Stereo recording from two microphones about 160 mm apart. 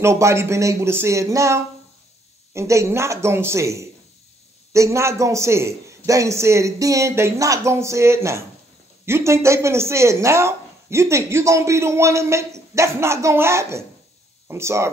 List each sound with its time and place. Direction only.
0.0 s speech: 15° right (ahead or behind)